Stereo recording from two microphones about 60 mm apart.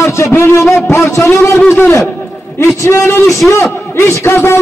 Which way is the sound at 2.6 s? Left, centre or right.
Left.